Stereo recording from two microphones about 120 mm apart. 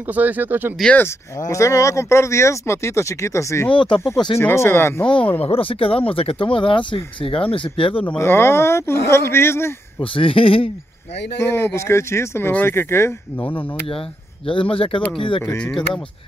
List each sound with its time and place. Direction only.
0.1 s speech: 15° right (ahead or behind)
1.5 s speech: 25° left (ahead or behind)
3.7 s speech: 40° left (ahead or behind)
4.4 s speech: 20° left (ahead or behind)
5.0 s speech: 10° left (ahead or behind)
5.4 s speech: 50° left (ahead or behind)
8.2 s speech: 20° left (ahead or behind)
10.1 s speech: 50° left (ahead or behind)
11.4 s speech: 20° left (ahead or behind)
14.5 s speech: 45° left (ahead or behind)
15.4 s speech: 10° left (ahead or behind)